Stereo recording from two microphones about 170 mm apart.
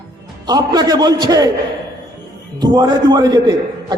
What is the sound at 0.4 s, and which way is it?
A man's voice, 25° right (ahead or behind).